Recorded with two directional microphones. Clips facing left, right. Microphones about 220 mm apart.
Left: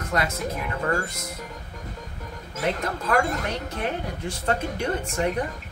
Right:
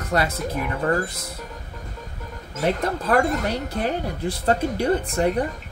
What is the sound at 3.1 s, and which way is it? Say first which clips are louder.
Speech: right 3 dB; 35° right (ahead or behind).